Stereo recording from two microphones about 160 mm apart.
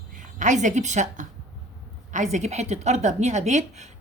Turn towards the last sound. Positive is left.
turn(degrees=-45)  # may be behind; listen again after turning